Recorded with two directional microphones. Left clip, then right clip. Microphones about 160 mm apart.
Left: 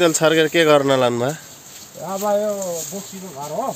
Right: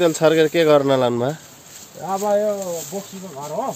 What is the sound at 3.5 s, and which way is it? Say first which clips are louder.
Speech: left 1 dB; 10° right (ahead or behind).